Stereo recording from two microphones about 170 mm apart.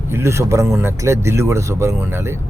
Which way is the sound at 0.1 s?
15° right (ahead or behind).